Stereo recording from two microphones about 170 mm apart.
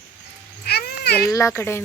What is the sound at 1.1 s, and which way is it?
Speech, 20° left (ahead or behind).